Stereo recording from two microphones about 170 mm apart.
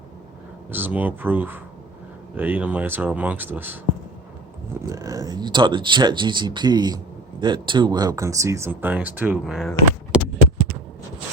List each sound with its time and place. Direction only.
0.7 s speech: 10° right (ahead or behind)
4.9 s speech: 20° right (ahead or behind); by 10.2 s 5° right (ahead or behind)